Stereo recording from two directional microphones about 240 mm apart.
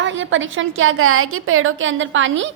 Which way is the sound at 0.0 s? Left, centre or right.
Right.